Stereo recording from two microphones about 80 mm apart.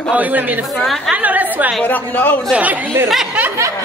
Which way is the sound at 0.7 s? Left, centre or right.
Centre.